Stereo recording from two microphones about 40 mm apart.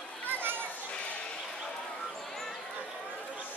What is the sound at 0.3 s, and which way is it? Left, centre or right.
Children playing, right.